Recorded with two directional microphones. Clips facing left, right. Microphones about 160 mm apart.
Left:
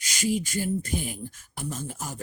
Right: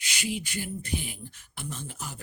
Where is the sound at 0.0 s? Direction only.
40° left (ahead or behind).